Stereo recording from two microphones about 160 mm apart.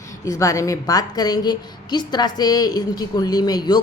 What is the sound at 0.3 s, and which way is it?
A woman's voice, 20° left (ahead or behind).